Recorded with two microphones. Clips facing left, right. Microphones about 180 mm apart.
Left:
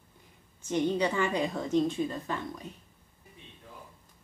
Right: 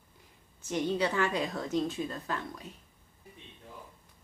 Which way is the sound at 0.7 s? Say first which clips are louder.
Left 2 dB; 5° right (ahead or behind).